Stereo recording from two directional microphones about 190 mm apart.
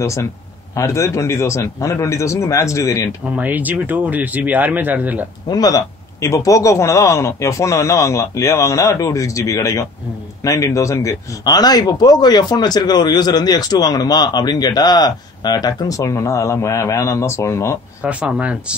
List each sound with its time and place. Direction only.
0.0 s a man's voice: 15° left (ahead or behind)
3.3 s speech: 10° right (ahead or behind)
5.5 s a man's voice: 20° left (ahead or behind)
18.0 s speech: 5° right (ahead or behind)